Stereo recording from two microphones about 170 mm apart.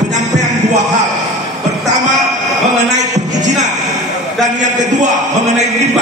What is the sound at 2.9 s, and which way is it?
Music, 45° right (ahead or behind).